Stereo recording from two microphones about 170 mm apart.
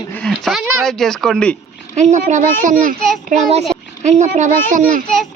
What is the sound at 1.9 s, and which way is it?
A child's voice, 45° right (ahead or behind).